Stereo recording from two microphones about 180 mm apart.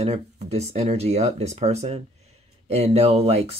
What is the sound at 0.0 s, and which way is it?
Speech, 35° right (ahead or behind).